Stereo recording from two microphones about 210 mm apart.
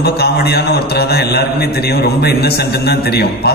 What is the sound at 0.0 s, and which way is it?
A man's voice, 50° left (ahead or behind).